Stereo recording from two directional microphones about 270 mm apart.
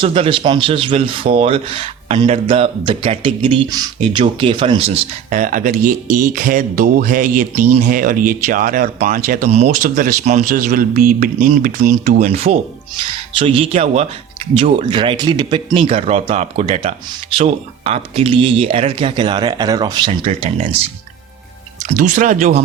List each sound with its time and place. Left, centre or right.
0.0 s speech: centre
21.8 s speech: right